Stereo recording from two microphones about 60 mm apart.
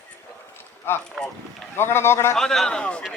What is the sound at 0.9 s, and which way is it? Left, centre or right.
Speech, left.